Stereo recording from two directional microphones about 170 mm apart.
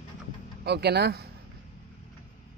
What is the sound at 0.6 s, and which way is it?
Speech, 70° right (ahead or behind).